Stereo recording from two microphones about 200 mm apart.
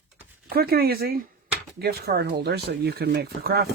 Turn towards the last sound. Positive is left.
turn(degrees=-50)  # may be behind; listen again after turning